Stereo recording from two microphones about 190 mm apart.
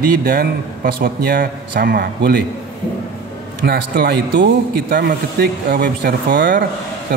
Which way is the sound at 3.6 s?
55° right (ahead or behind).